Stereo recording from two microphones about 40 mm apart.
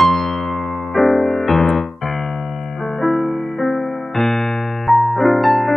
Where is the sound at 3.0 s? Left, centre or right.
Centre.